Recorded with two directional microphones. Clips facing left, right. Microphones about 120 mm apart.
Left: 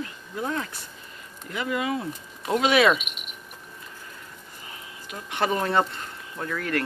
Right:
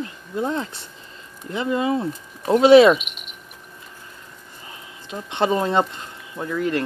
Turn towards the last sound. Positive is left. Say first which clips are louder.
# right 5 dB
turn(degrees=-20)  # may be behind; listen again after turning